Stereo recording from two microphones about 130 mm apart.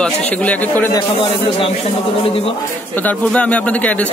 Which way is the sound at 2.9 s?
10° left (ahead or behind).